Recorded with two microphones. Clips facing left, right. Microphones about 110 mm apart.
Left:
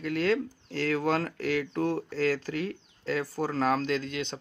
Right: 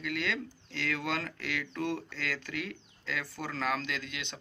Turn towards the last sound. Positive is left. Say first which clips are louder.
# left 9 dB
turn(degrees=40)  # may be behind; listen again after turning